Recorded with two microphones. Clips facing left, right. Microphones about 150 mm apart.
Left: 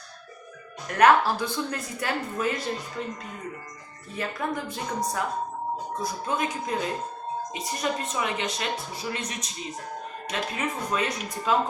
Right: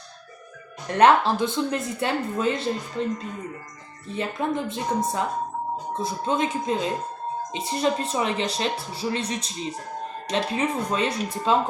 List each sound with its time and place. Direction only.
0.9 s a woman's voice: 25° right (ahead or behind)
4.1 s a woman's voice: 25° right (ahead or behind)